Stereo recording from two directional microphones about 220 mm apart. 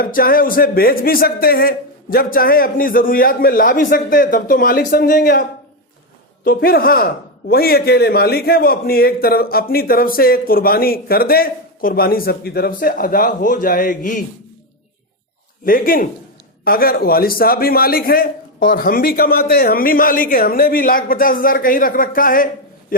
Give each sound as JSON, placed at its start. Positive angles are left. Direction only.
{"t": 0.0, "sound": "a man's voice", "side_deg": 40}
{"t": 15.6, "sound": "a man's voice", "side_deg": 40}